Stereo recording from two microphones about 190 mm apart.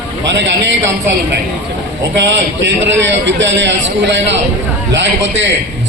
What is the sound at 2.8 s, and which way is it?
A man's voice, 75° right (ahead or behind).